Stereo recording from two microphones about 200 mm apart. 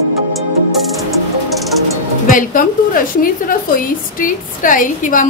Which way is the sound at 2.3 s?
45° left (ahead or behind).